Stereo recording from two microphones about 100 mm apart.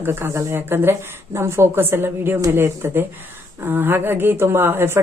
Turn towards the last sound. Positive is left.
turn(degrees=-25)  # may be behind; listen again after turning